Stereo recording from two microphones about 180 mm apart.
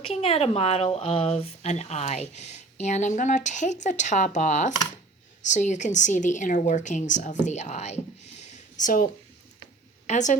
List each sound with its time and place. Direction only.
0.0 s speech: 35° left (ahead or behind)
10.1 s a woman's voice: 40° left (ahead or behind)